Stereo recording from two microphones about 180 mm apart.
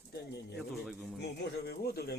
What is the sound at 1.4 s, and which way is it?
Speech, 65° left (ahead or behind).